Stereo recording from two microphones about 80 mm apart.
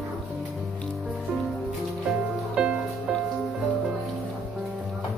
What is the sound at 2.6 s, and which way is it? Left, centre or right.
Music, centre.